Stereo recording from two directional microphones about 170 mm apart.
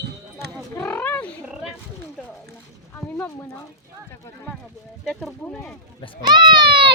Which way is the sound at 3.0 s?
15° left (ahead or behind).